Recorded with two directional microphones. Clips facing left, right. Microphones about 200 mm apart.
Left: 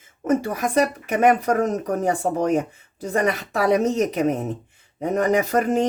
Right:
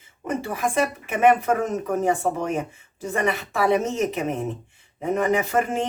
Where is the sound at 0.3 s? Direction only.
40° left (ahead or behind).